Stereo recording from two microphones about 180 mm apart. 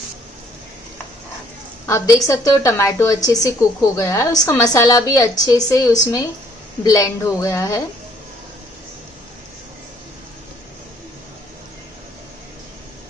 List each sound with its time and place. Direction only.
1.9 s a woman's voice: 20° left (ahead or behind)